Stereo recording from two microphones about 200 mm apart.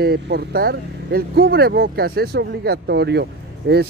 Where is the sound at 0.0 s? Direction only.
55° right (ahead or behind).